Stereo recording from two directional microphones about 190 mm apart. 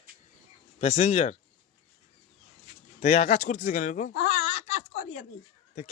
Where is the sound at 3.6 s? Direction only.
45° left (ahead or behind).